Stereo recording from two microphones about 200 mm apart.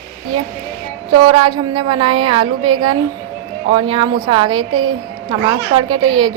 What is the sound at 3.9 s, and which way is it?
Speech, 25° right (ahead or behind).